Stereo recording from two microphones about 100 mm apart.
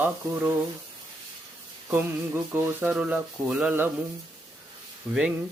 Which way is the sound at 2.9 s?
10° right (ahead or behind).